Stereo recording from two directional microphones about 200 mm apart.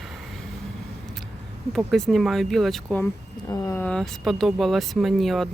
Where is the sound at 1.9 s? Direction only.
Centre (ahead or behind).